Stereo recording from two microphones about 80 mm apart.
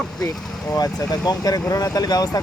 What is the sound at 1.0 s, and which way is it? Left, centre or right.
Speech, left.